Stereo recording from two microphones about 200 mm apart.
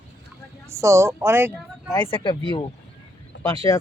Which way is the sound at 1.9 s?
25° left (ahead or behind).